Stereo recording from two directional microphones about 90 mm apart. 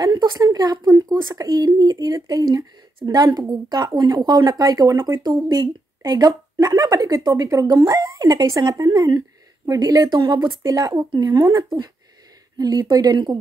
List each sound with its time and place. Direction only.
0.0 s a woman's voice: 45° right (ahead or behind)
3.0 s a woman's voice: 30° right (ahead or behind)
3.3 s a woman's voice: 50° right (ahead or behind)
5.2 s a woman's voice: 50° right (ahead or behind)
10.6 s a woman's voice: 40° right (ahead or behind)